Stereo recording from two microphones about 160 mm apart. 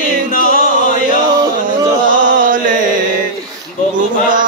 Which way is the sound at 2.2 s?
55° right (ahead or behind).